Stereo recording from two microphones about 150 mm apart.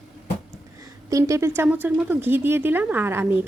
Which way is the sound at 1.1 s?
20° right (ahead or behind).